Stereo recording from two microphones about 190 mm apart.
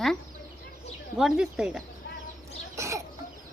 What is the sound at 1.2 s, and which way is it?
Speech, 5° right (ahead or behind).